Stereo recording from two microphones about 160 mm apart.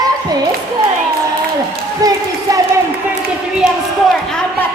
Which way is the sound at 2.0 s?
20° right (ahead or behind).